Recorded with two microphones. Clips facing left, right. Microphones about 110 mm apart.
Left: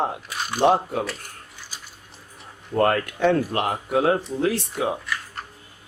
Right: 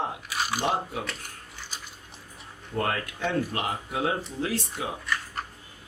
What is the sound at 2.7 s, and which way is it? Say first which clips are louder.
Speech: left 8 dB; 55° left (ahead or behind).